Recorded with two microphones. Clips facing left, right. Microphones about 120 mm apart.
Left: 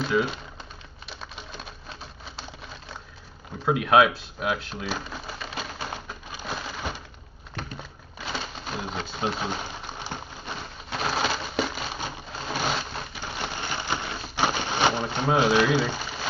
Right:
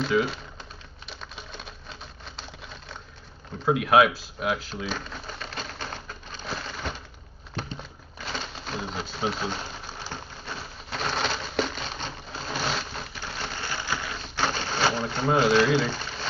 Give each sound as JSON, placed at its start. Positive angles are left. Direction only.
{"t": 0.0, "sound": "speech", "side_deg": 0}
{"t": 1.0, "sound": "a sound", "side_deg": 0}
{"t": 3.6, "sound": "typewriter", "side_deg": 0}
{"t": 10.9, "sound": "crushing", "side_deg": 5}
{"t": 13.2, "sound": "a sound", "side_deg": 15}
{"t": 15.2, "sound": "speech", "side_deg": 5}